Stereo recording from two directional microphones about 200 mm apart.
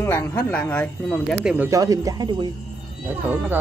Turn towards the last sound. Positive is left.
turn(degrees=-10)  # may be behind; listen again after turning